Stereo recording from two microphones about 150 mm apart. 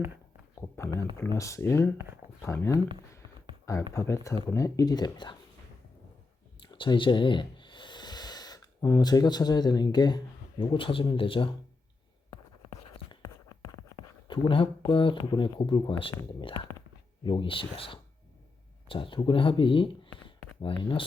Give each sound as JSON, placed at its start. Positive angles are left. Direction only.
{"t": 1.1, "sound": "speech", "side_deg": 20}
{"t": 3.9, "sound": "speech", "side_deg": 20}
{"t": 6.6, "sound": "snort", "side_deg": 35}
{"t": 10.6, "sound": "speech", "side_deg": 35}
{"t": 14.3, "sound": "speech", "side_deg": 35}